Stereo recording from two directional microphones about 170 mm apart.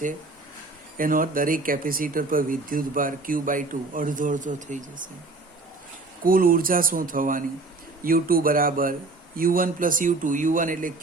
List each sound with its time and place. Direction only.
0.9 s speech: 55° right (ahead or behind)
6.2 s speech: 55° right (ahead or behind)